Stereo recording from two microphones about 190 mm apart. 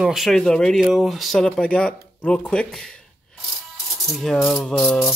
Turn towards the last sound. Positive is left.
turn(degrees=5)  # may be behind; listen again after turning